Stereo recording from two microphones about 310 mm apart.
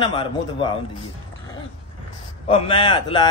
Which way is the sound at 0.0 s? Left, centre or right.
Centre.